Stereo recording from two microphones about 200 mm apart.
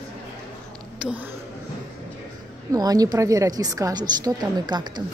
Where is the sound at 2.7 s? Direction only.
20° right (ahead or behind).